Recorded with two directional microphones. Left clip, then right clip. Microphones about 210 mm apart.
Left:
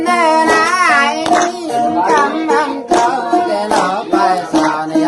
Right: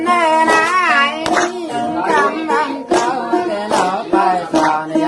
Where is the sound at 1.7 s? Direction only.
40° left (ahead or behind).